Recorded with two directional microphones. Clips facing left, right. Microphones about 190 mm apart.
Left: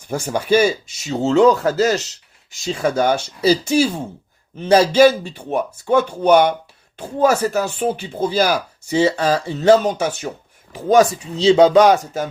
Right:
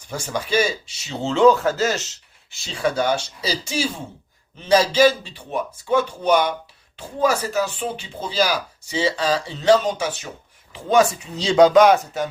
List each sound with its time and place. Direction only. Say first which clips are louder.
0.1 s speech: left 6 dB; 50° left (ahead or behind)
4.6 s speech: left 4 dB; 55° left (ahead or behind)
11.3 s speech: left 2 dB; 25° left (ahead or behind)